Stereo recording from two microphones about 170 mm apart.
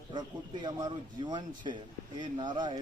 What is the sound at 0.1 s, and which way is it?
A man's voice, 25° right (ahead or behind).